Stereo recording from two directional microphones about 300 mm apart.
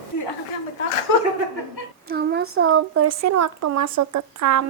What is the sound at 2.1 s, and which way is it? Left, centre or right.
Speech, right.